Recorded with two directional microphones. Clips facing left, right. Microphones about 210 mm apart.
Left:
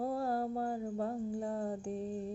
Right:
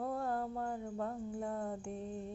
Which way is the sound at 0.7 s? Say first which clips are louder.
Left 4 dB; 30° left (ahead or behind).